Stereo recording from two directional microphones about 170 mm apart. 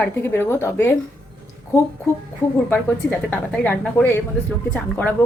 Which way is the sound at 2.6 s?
10° left (ahead or behind).